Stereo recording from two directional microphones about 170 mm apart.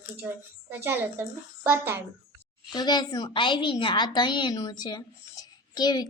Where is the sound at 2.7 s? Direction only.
25° left (ahead or behind).